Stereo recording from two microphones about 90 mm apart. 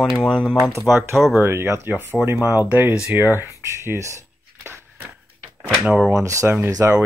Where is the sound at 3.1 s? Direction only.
25° right (ahead or behind).